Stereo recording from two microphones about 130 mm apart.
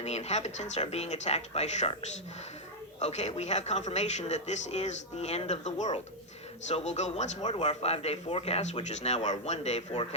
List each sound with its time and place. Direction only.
0.0 s a man's voice: 55° left (ahead or behind)
3.0 s a man's voice: 60° left (ahead or behind)